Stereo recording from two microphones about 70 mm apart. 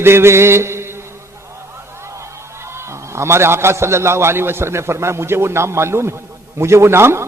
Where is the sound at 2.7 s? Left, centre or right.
Right.